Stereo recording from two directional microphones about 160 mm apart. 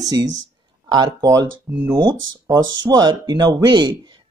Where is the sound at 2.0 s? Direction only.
25° right (ahead or behind).